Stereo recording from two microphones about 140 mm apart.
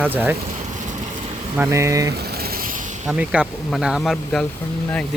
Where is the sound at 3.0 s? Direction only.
5° right (ahead or behind).